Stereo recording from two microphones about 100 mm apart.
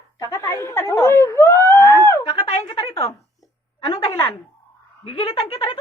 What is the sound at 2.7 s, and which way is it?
Speech, 70° left (ahead or behind).